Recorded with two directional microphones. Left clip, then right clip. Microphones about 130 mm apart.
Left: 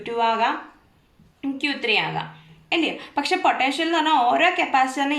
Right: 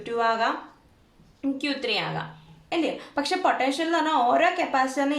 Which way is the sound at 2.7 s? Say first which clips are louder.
Left 4 dB; 50° right (ahead or behind).